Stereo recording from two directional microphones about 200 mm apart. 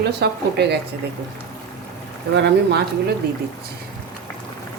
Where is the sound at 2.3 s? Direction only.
55° right (ahead or behind).